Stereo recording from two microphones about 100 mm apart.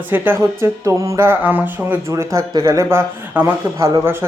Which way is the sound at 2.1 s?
30° right (ahead or behind).